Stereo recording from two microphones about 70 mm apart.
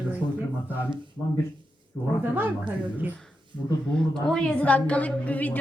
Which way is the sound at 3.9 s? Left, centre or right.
Centre.